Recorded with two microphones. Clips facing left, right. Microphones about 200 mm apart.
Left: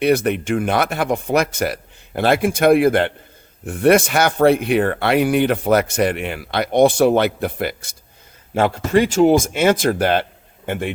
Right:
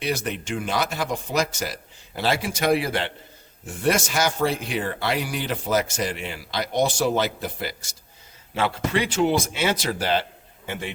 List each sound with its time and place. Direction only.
0.0 s speech: 60° left (ahead or behind)
8.5 s a man's voice: 45° left (ahead or behind)